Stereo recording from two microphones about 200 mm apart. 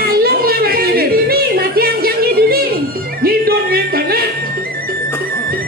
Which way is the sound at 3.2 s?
50° right (ahead or behind).